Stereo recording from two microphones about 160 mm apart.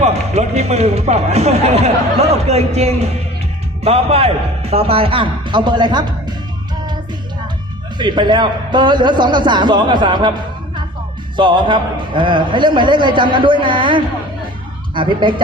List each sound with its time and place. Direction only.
0.0 s speech: 40° right (ahead or behind)
7.9 s a man's voice: 30° right (ahead or behind)